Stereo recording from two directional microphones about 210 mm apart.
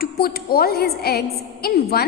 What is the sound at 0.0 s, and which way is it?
A woman's voice, 45° left (ahead or behind).